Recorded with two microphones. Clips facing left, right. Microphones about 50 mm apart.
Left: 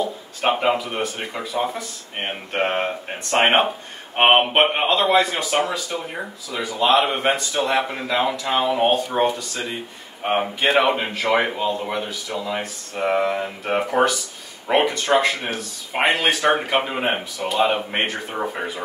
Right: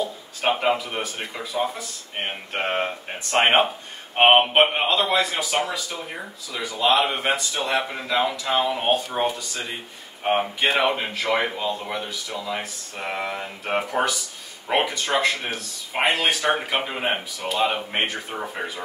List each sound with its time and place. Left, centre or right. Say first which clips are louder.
0.4 s speech: left 2 dB; centre